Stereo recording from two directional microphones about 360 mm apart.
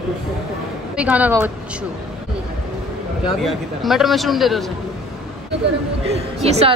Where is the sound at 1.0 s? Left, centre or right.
Centre.